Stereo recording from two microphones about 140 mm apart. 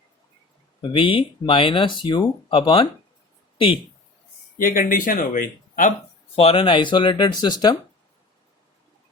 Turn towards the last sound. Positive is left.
turn(degrees=30)  # may be behind; listen again after turning